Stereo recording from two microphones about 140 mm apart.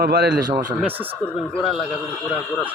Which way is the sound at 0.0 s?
90° right.